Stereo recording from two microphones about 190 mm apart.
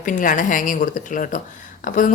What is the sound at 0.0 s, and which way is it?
A woman's voice, 45° left (ahead or behind).